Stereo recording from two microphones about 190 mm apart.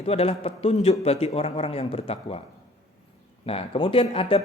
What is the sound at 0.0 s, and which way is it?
A man's voice, 30° left (ahead or behind).